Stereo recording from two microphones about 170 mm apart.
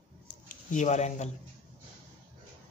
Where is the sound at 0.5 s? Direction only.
45° left (ahead or behind).